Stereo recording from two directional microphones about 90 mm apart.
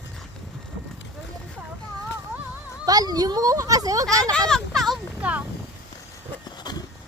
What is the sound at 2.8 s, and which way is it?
Speech, 45° right (ahead or behind).